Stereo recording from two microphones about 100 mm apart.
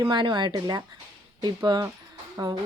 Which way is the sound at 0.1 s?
50° right (ahead or behind).